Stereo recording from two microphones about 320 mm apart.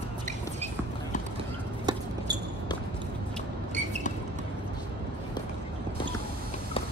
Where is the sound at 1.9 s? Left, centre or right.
Centre.